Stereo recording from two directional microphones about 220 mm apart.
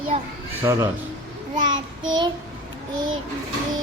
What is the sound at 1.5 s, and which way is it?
Child singing, 20° right (ahead or behind).